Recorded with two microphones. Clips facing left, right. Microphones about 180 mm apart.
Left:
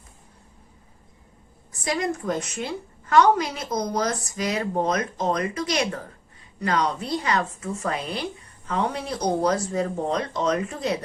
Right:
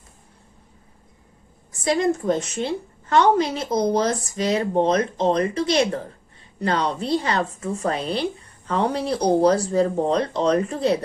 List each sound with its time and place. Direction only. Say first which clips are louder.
1.8 s a woman's voice: right 6 dB; 25° right (ahead or behind)